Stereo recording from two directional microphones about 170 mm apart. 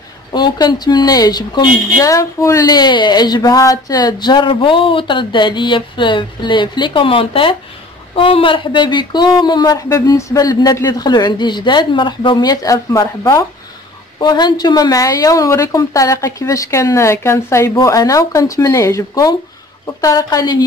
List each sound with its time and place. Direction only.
0.3 s speech: 25° left (ahead or behind)